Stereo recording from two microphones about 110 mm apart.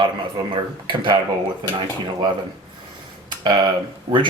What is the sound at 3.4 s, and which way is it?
Speech, 45° right (ahead or behind).